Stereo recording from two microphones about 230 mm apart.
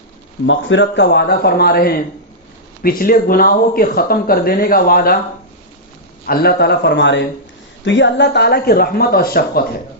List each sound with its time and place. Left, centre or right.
0.4 s speech: left
6.2 s speech: left